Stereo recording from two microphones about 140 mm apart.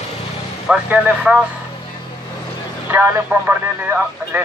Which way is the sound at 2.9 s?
15° right (ahead or behind).